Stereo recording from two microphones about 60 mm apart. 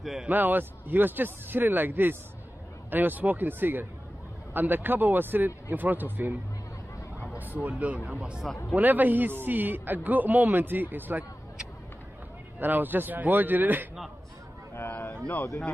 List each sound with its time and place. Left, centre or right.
0.3 s a man's voice: right
7.3 s speech: right
8.7 s a man's voice: right
12.5 s a man's voice: right
14.9 s speech: left
15.3 s speech: left